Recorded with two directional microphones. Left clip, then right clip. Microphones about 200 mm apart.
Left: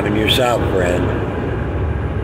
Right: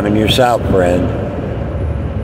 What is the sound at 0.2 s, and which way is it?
Speech, 30° right (ahead or behind).